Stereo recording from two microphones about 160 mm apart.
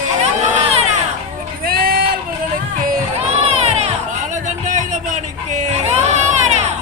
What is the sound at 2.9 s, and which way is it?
Crowd, 50° right (ahead or behind).